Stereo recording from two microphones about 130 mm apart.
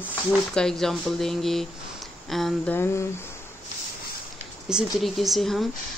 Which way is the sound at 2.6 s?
20° left (ahead or behind).